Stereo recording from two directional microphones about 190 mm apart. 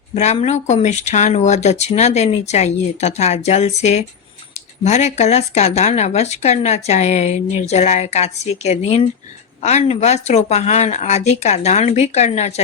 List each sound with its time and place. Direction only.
0.1 s speech: 35° left (ahead or behind)